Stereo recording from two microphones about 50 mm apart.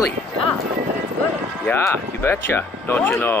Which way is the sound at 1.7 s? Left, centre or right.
Left.